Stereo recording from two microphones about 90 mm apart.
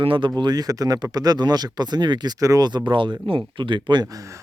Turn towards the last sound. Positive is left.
turn(degrees=-60)  # may be behind; listen again after turning